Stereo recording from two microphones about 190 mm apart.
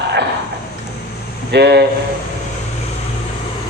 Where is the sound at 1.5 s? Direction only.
60° right (ahead or behind).